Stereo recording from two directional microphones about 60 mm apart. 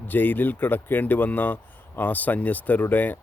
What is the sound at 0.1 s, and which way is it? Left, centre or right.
Speech, left.